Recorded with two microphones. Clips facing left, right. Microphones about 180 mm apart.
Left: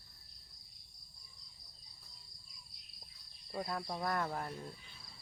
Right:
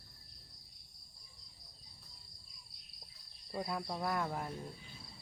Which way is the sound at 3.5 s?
5° right (ahead or behind).